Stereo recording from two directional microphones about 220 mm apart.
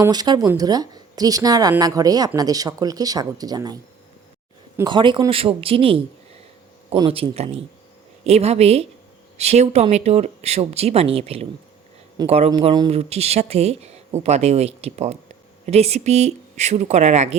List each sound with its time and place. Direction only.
0.0 s speech: 20° right (ahead or behind)
4.8 s speech: 20° right (ahead or behind)